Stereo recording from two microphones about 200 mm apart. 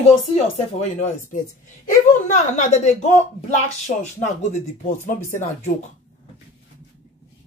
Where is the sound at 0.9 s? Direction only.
35° left (ahead or behind).